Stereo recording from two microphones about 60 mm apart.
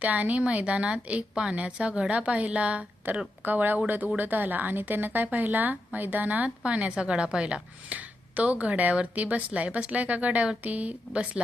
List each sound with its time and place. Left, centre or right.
0.0 s a woman's voice: right